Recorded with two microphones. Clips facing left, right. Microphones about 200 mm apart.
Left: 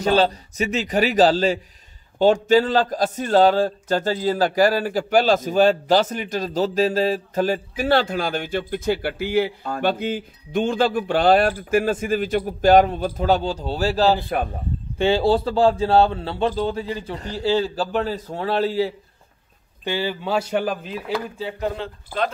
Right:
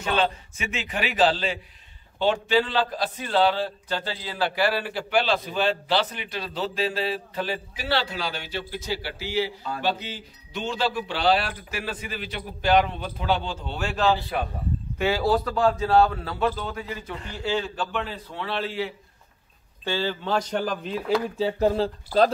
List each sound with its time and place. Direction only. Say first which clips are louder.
0.0 s a man's voice: left 6 dB; 40° left (ahead or behind)
14.1 s a man's voice: left 4 dB; 50° left (ahead or behind)
15.0 s speech: left 5 dB; 30° left (ahead or behind)
19.8 s a man's voice: left 2 dB; 15° left (ahead or behind)
21.4 s speech: right 5 dB; 35° right (ahead or behind)